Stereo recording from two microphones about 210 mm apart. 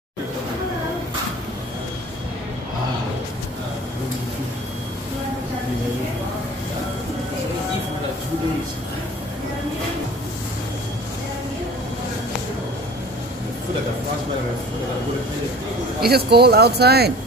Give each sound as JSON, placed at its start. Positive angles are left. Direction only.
{"t": 16.1, "sound": "speech", "side_deg": -50}